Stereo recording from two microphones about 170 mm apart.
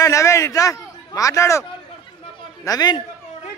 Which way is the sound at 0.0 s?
15° left (ahead or behind).